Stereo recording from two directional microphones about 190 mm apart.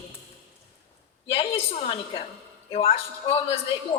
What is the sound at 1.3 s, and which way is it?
A woman's voice, 30° left (ahead or behind).